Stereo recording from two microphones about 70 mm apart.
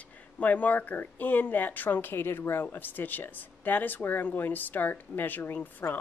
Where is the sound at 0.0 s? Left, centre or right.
Left.